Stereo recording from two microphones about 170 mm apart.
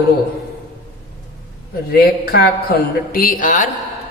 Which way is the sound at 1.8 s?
65° left (ahead or behind).